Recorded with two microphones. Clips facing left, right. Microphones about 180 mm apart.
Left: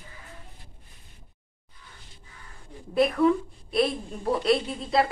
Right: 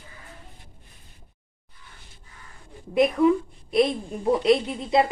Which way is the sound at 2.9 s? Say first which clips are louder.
Right 2 dB; 20° right (ahead or behind).